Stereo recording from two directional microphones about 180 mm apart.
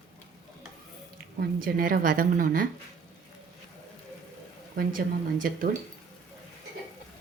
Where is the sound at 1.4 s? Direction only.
55° right (ahead or behind).